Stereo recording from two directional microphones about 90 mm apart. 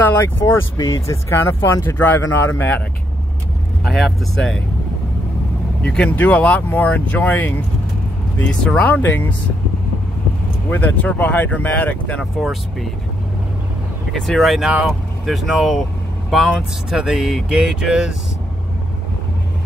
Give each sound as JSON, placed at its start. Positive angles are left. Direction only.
{"t": 0.0, "sound": "speech", "side_deg": 25}
{"t": 0.7, "sound": "speech", "side_deg": 40}
{"t": 3.8, "sound": "speech", "side_deg": 5}
{"t": 5.8, "sound": "speech", "side_deg": 15}
{"t": 10.7, "sound": "speech", "side_deg": 20}
{"t": 14.1, "sound": "speech", "side_deg": 5}
{"t": 16.9, "sound": "speech", "side_deg": -5}